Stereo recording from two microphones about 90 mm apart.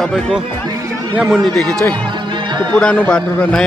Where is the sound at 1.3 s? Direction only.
5° left (ahead or behind).